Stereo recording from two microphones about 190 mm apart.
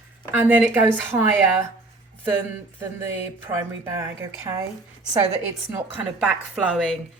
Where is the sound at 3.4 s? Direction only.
15° right (ahead or behind).